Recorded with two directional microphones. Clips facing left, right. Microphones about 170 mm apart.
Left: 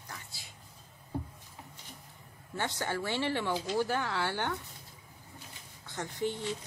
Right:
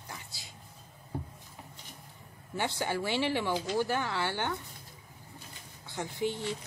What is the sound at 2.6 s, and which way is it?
Speech, 10° right (ahead or behind).